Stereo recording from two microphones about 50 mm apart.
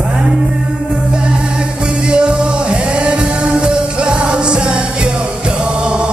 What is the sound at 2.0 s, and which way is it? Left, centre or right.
Music, centre.